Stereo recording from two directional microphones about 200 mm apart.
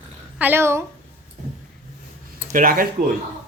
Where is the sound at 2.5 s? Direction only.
45° right (ahead or behind).